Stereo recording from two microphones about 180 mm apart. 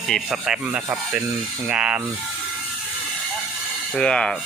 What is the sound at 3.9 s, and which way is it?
Speech, 5° left (ahead or behind).